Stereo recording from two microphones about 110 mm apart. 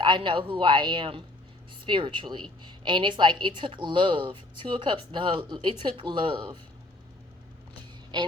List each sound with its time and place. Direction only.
0.0 s a woman's voice: 45° right (ahead or behind)
8.1 s a woman's voice: 45° right (ahead or behind)